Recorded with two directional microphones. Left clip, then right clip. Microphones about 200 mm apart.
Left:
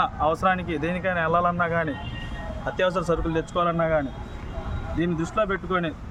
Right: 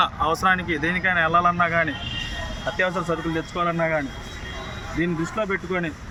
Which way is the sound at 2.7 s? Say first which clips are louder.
Left 1 dB; 25° left (ahead or behind).